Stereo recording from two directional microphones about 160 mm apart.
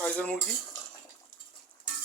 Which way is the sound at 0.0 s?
10° left (ahead or behind).